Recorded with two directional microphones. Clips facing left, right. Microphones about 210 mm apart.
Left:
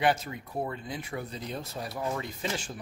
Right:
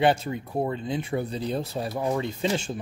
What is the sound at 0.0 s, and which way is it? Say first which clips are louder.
Speech: right 5 dB; 30° right (ahead or behind).